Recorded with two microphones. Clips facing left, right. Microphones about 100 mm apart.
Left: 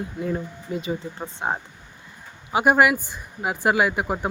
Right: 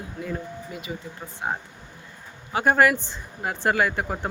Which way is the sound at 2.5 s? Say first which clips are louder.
Left 2 dB; 15° left (ahead or behind).